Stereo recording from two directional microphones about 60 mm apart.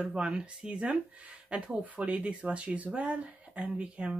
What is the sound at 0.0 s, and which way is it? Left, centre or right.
Speech, centre.